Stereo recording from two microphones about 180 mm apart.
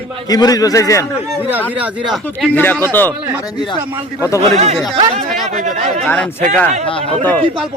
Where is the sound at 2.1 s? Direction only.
5° left (ahead or behind).